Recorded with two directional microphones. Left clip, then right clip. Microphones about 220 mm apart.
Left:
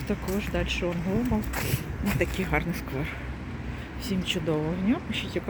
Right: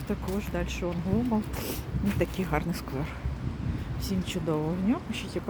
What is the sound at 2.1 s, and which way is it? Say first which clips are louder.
Speech: left 2 dB; 10° right (ahead or behind).